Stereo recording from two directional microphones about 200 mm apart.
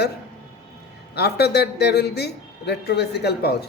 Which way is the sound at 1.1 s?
55° left (ahead or behind).